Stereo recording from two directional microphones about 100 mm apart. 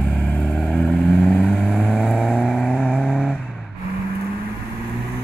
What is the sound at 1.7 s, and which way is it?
Vehicle, 5° right (ahead or behind).